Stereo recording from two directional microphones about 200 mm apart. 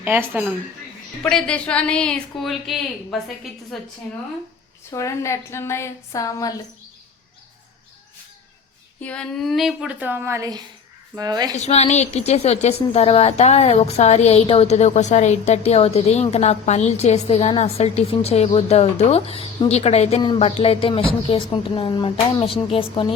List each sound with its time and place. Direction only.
0.0 s a woman's voice: 10° right (ahead or behind)
1.2 s a woman's voice: 5° left (ahead or behind)
4.9 s speech: 15° left (ahead or behind)
9.0 s a woman's voice: 5° left (ahead or behind); by 11.5 s 20° right (ahead or behind)
11.5 s a woman's voice: 35° left (ahead or behind)